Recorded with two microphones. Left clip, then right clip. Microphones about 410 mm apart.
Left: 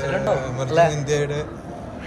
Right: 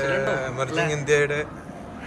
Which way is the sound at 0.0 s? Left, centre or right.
Centre.